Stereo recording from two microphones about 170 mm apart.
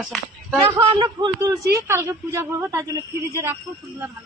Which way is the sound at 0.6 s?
30° right (ahead or behind).